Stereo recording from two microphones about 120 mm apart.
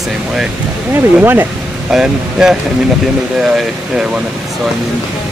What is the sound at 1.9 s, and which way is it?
Speech, 5° right (ahead or behind).